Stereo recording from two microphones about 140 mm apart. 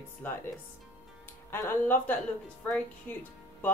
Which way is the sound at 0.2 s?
15° left (ahead or behind).